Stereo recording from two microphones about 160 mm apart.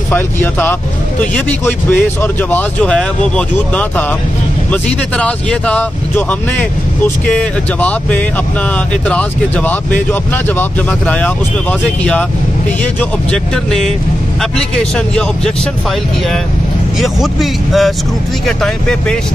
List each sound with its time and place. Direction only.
0.1 s speech: 10° left (ahead or behind)
13.3 s speech: 5° left (ahead or behind)
17.0 s speech: centre (ahead or behind)